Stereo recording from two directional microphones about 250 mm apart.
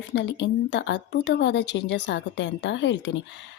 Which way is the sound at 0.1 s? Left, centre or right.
Left.